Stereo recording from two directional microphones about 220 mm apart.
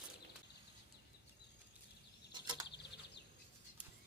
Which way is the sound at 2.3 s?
20° right (ahead or behind).